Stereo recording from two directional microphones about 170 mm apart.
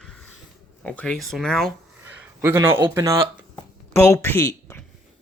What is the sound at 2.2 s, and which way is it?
Speech, 15° right (ahead or behind).